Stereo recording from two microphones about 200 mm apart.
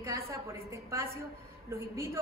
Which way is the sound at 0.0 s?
15° right (ahead or behind).